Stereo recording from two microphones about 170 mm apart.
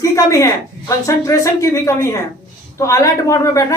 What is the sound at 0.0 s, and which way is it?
A man's voice, 20° left (ahead or behind).